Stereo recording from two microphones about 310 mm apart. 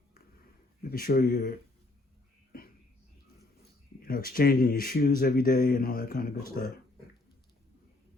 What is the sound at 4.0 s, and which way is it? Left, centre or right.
Speech, left.